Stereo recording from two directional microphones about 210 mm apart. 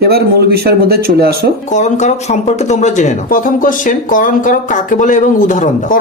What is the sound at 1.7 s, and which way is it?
Speech, 35° left (ahead or behind).